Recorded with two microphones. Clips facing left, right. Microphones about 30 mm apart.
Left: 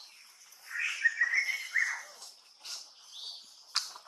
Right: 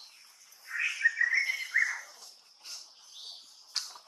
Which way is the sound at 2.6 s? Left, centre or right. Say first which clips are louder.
Left 2 dB; left.